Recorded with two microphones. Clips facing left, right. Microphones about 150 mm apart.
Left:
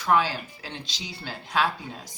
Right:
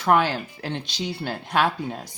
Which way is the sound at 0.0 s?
60° right (ahead or behind).